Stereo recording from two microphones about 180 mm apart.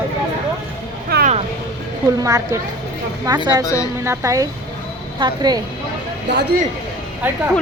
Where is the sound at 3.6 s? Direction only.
20° left (ahead or behind).